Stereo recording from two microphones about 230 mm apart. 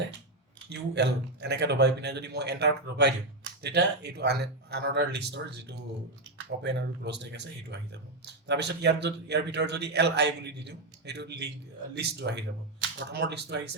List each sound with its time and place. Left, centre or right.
0.7 s a man's voice: right